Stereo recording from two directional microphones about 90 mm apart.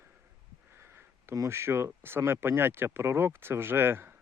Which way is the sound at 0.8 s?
25° right (ahead or behind).